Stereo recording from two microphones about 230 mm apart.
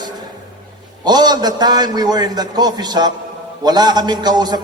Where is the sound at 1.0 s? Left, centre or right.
Centre.